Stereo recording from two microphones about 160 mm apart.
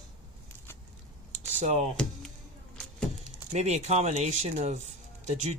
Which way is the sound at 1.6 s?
45° right (ahead or behind).